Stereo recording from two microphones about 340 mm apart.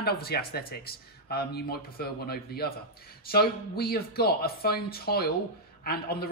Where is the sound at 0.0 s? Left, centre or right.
Left.